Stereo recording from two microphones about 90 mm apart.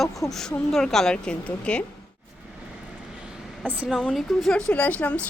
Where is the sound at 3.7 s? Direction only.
15° right (ahead or behind).